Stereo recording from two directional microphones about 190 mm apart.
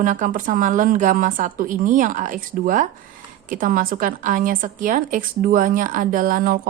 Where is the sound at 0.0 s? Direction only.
45° right (ahead or behind).